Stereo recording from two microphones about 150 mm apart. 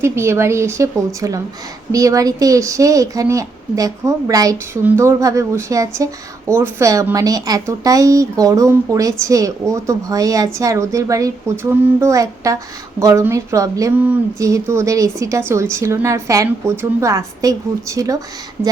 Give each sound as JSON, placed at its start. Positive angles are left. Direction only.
{"t": 0.0, "sound": "a woman's voice", "side_deg": -15}